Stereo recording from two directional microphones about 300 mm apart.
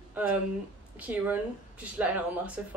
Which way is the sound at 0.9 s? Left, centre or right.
Centre.